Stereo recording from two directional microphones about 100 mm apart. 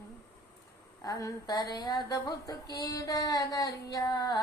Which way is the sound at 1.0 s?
35° left (ahead or behind).